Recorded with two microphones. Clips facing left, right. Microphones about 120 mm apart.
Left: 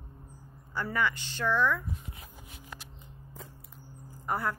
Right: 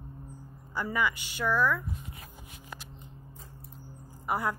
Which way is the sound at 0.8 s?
10° right (ahead or behind).